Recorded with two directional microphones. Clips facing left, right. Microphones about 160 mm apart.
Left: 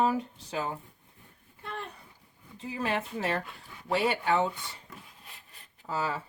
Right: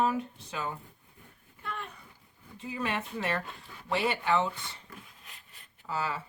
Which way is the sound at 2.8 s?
35° left (ahead or behind).